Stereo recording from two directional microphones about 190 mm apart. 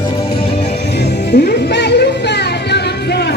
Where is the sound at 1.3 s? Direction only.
55° left (ahead or behind).